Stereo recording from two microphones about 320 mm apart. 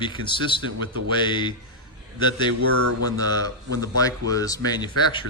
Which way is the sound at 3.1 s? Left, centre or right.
Centre.